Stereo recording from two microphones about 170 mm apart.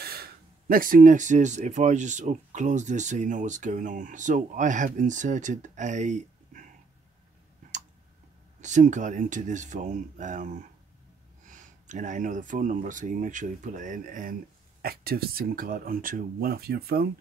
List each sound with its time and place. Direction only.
0.0 s speech: 65° right (ahead or behind); by 6.6 s 45° right (ahead or behind)
8.5 s speech: 45° right (ahead or behind)
14.8 s speech: 65° right (ahead or behind)